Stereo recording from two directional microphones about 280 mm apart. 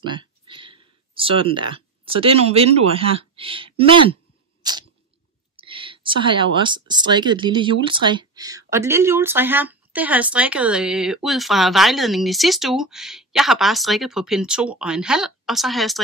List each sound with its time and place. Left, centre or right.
0.0 s speech: centre
4.6 s chewing: centre
5.6 s speech: centre